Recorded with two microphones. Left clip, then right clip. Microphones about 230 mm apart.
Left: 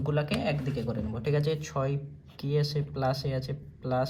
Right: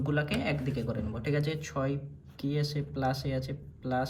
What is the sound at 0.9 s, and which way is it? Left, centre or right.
Speech, left.